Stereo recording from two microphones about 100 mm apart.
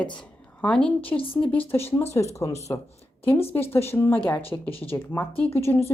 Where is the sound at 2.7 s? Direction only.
40° left (ahead or behind).